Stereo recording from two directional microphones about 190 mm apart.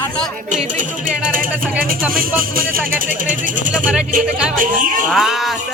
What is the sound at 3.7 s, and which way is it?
Speech, 5° right (ahead or behind).